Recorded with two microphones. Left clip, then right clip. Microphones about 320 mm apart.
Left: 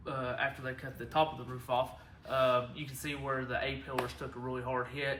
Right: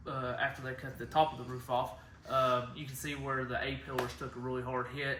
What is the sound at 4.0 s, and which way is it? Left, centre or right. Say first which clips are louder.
Speech: even; centre.